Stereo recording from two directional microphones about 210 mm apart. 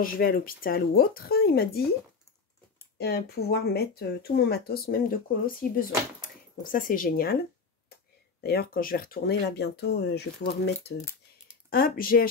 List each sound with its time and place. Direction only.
0.0 s speech: 45° left (ahead or behind)
3.0 s speech: 50° left (ahead or behind)
8.4 s speech: 45° left (ahead or behind)